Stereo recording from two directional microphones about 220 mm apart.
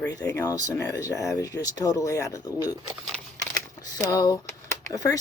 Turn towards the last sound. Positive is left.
turn(degrees=15)  # may be behind; listen again after turning